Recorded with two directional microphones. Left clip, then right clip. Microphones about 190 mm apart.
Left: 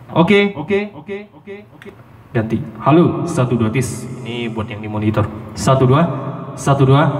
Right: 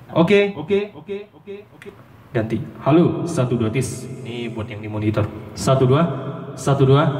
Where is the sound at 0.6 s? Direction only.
40° left (ahead or behind).